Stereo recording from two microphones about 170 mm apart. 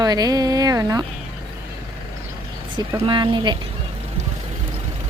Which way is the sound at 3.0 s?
30° right (ahead or behind).